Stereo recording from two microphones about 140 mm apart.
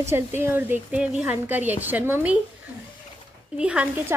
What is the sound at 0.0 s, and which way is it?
Speech, 15° right (ahead or behind).